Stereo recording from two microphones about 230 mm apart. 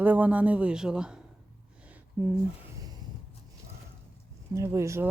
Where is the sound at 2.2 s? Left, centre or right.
Centre.